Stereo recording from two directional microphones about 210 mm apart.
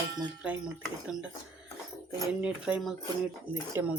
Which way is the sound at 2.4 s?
5° right (ahead or behind).